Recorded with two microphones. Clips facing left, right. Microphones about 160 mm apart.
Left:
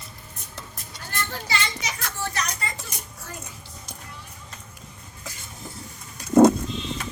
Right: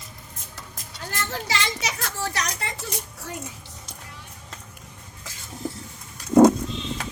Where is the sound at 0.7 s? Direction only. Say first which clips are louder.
Right 1 dB; 90° right.